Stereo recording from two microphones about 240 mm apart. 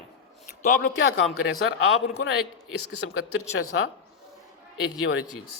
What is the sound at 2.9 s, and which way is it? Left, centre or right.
Speech, left.